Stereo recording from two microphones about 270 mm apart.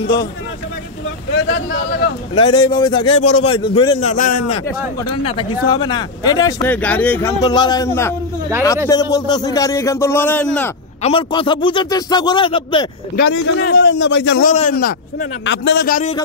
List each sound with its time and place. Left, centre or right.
0.0 s a man's voice: centre
2.3 s a man's voice: centre
11.0 s a man's voice: left
13.3 s a man's voice: left
14.5 s a man's voice: left
15.1 s speech: left